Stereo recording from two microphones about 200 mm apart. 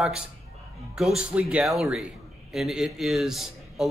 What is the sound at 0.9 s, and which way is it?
A man's voice, 5° right (ahead or behind).